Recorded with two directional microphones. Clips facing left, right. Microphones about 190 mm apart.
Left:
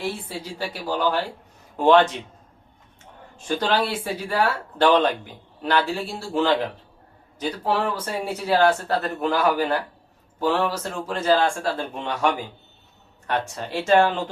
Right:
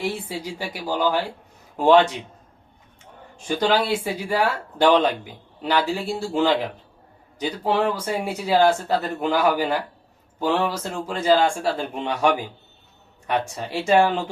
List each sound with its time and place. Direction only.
0.0 s speech: 15° right (ahead or behind)
3.4 s speech: 10° right (ahead or behind)
7.6 s speech: 15° right (ahead or behind)